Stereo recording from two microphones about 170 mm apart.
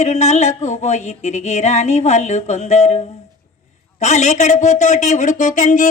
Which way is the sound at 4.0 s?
45° left (ahead or behind).